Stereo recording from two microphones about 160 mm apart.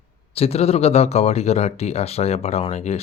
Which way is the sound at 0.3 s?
40° left (ahead or behind).